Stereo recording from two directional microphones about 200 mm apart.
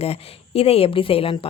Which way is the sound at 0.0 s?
30° left (ahead or behind).